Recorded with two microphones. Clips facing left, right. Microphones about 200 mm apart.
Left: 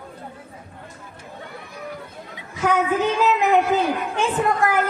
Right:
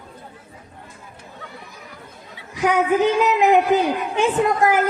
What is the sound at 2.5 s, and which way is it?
A woman's voice, 15° right (ahead or behind).